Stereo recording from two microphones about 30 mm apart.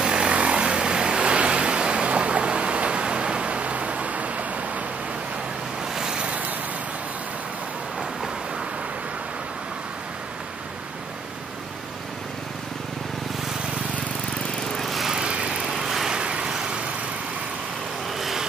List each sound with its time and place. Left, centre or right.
0.0 s vehicle: right
0.3 s vehicle: right
5.9 s vehicle: right
6.2 s vehicle: right
14.8 s lawn mower: centre
15.1 s lawn mower: right
15.7 s vehicle: centre
16.1 s vehicle: right
18.1 s vehicle: centre